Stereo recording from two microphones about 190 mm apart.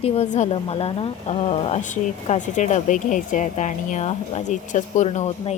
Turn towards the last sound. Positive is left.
turn(degrees=35)  # may be behind; listen again after turning